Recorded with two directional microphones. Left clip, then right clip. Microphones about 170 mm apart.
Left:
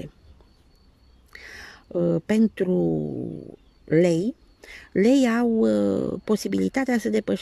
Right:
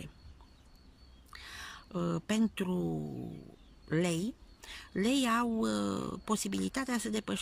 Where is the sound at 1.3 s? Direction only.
35° left (ahead or behind).